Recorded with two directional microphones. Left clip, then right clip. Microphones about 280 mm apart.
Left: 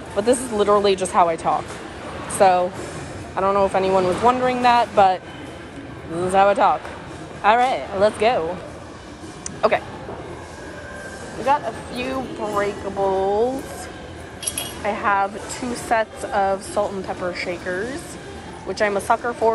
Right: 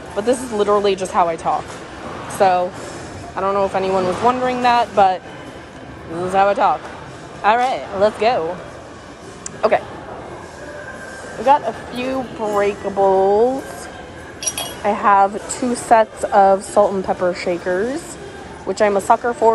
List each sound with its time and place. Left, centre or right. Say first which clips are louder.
0.2 s a woman's voice: right 1 dB; centre
6.3 s a woman's voice: right 1 dB; centre
9.6 s a woman's voice: right 3 dB; centre
11.4 s a woman's voice: right 6 dB; centre
14.8 s a woman's voice: right 7 dB; centre